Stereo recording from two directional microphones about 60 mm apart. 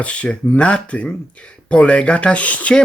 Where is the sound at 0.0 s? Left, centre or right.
Left.